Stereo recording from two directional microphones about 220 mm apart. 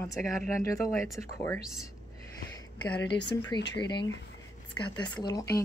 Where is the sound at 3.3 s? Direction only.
15° left (ahead or behind).